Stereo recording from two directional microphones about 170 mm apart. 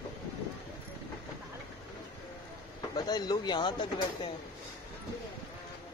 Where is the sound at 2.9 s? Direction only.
25° left (ahead or behind).